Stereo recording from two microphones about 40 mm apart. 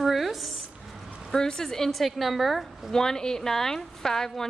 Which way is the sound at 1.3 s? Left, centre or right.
Centre.